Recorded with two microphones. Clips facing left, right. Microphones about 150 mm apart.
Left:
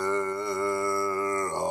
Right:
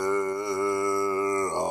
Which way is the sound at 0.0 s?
10° right (ahead or behind).